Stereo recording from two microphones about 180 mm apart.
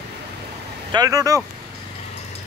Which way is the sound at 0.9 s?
20° right (ahead or behind).